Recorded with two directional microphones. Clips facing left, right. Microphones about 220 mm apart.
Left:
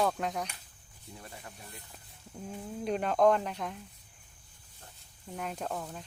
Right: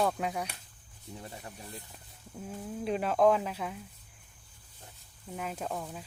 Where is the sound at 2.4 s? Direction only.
Centre (ahead or behind).